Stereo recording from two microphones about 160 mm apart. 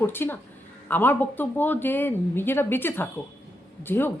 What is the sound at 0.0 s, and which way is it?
A woman's voice, 15° left (ahead or behind).